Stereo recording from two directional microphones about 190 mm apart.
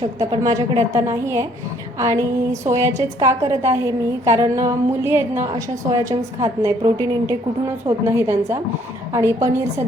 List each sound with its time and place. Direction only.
0.2 s a woman's voice: 15° right (ahead or behind)